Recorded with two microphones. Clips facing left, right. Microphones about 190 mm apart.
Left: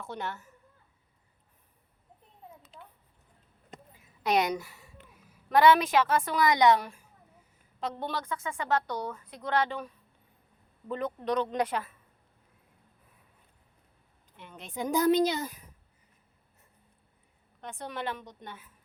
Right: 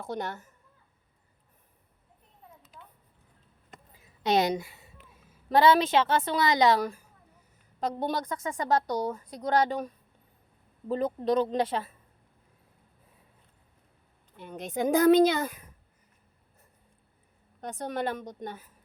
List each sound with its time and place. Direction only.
0.0 s speech: 40° right (ahead or behind)
2.7 s a sound: 30° left (ahead or behind)
4.2 s a woman's voice: 30° right (ahead or behind)
14.3 s speech: 40° right (ahead or behind); by 15.6 s 60° right (ahead or behind)
17.6 s speech: 40° right (ahead or behind)